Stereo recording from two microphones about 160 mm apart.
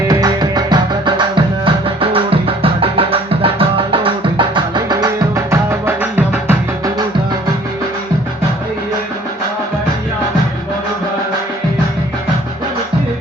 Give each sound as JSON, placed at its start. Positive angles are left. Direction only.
{"t": 0.1, "sound": "music", "side_deg": -20}